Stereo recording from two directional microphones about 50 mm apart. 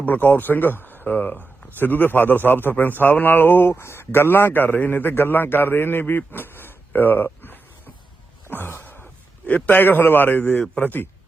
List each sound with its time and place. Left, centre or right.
0.0 s speech: left
8.4 s a sound: left
9.6 s a man's voice: left